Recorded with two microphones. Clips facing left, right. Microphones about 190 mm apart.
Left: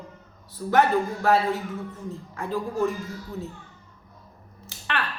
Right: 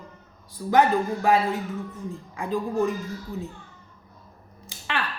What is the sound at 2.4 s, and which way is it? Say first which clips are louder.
Speech: right 2 dB; 15° right (ahead or behind).